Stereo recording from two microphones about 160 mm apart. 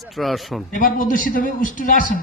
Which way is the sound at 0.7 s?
55° left (ahead or behind).